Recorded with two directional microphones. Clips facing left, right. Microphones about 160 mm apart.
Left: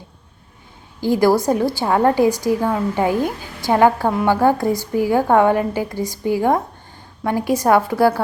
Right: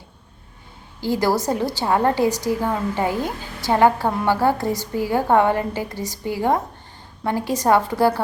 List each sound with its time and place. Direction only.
1.0 s a woman's voice: 15° left (ahead or behind)